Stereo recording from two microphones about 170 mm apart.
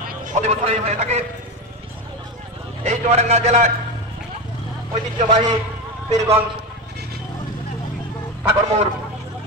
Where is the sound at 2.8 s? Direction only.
40° right (ahead or behind).